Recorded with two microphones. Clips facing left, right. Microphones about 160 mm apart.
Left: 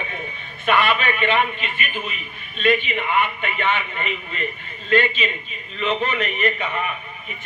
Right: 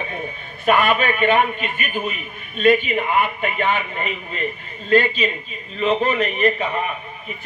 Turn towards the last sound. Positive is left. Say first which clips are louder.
# right 4 dB
turn(degrees=-35)  # may be behind; listen again after turning